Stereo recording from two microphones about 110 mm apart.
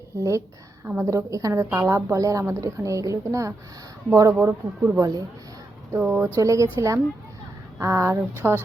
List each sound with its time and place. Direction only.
0.2 s a woman's voice: 30° right (ahead or behind)
4.4 s speech: 15° right (ahead or behind)
4.9 s speech: 30° right (ahead or behind)
6.0 s speech: 15° right (ahead or behind)
6.3 s a woman's voice: 30° right (ahead or behind)